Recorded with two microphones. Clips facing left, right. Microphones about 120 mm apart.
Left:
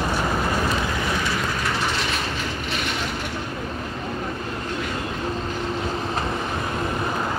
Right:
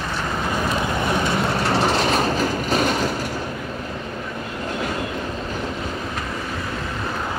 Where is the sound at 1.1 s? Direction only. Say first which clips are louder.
Right 4 dB; 25° right (ahead or behind); by 3.1 s 40° right (ahead or behind).